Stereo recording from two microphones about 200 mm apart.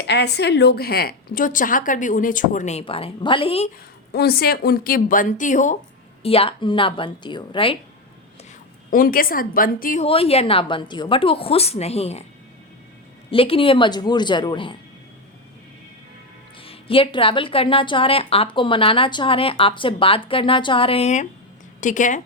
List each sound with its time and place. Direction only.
0.1 s a woman's voice: 55° left (ahead or behind); by 3.7 s 30° left (ahead or behind)
4.1 s a woman's voice: 50° left (ahead or behind); by 7.8 s 25° left (ahead or behind)
8.9 s a woman's voice: 45° left (ahead or behind)
10.1 s a woman's voice: 30° left (ahead or behind)
13.3 s a woman's voice: 25° left (ahead or behind)
16.6 s a woman's voice: 25° left (ahead or behind)